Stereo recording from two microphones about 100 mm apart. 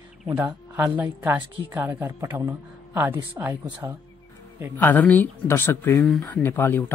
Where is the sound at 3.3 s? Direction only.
20° right (ahead or behind).